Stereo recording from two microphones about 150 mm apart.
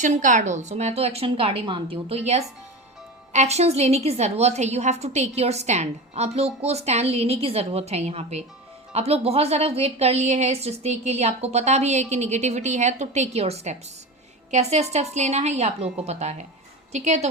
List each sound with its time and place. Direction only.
0.0 s a woman's voice: 55° right (ahead or behind)